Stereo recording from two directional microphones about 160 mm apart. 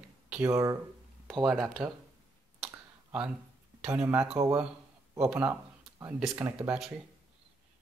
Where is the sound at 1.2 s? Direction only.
Centre (ahead or behind).